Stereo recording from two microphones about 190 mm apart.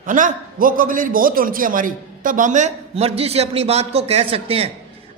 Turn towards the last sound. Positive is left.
turn(degrees=-30)  # may be behind; listen again after turning